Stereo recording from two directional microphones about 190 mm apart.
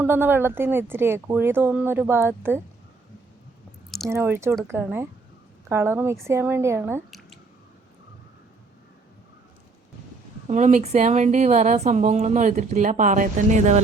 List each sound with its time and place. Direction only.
0.0 s speech: 10° right (ahead or behind)
4.1 s speech: 10° right (ahead or behind)
7.1 s squish: centre (ahead or behind)
10.5 s a woman's voice: 40° right (ahead or behind)